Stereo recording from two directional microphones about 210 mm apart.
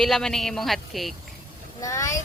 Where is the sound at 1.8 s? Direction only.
15° left (ahead or behind).